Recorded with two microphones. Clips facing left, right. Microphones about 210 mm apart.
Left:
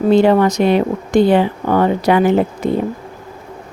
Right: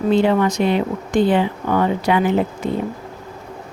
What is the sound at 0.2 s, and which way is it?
A woman's voice, 40° left (ahead or behind).